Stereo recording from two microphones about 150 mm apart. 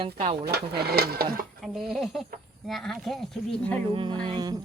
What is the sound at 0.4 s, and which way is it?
Speech, 90° right.